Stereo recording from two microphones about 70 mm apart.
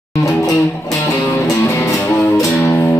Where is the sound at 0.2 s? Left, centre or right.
Left.